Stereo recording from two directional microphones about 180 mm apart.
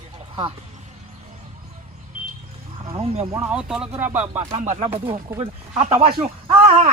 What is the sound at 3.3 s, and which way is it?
Speech, 5° right (ahead or behind).